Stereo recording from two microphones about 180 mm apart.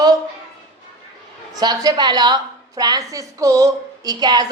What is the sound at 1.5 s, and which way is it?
A woman's voice, 20° right (ahead or behind).